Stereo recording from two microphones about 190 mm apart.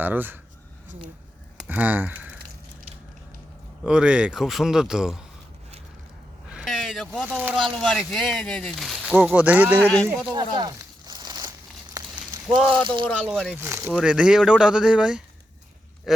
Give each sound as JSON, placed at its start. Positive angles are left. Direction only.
{"t": 0.0, "sound": "speech", "side_deg": -10}
{"t": 1.5, "sound": "speech", "side_deg": -10}
{"t": 3.8, "sound": "speech", "side_deg": -5}
{"t": 6.5, "sound": "speech", "side_deg": 0}
{"t": 9.8, "sound": "speech", "side_deg": 5}
{"t": 10.3, "sound": "a sound", "side_deg": -25}
{"t": 12.5, "sound": "speech", "side_deg": 5}